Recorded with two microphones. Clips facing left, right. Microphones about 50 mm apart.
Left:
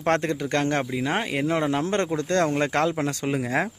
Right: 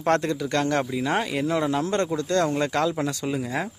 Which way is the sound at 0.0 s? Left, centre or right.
Left.